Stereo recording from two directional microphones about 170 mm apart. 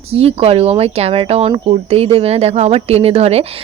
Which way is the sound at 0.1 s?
35° right (ahead or behind).